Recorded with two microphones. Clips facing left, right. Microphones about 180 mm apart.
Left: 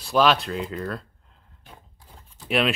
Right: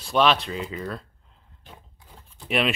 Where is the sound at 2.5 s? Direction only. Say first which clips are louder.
Left 1 dB; centre (ahead or behind).